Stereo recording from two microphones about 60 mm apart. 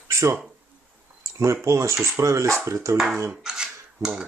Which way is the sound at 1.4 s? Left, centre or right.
Right.